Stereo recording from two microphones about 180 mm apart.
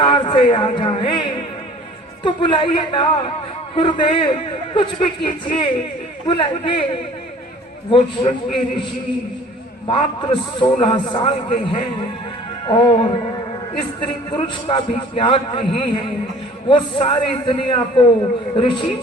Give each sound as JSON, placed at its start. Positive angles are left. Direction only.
{"t": 0.0, "sound": "a man's voice", "side_deg": 30}
{"t": 7.9, "sound": "a man's voice", "side_deg": 30}
{"t": 9.8, "sound": "a man's voice", "side_deg": 25}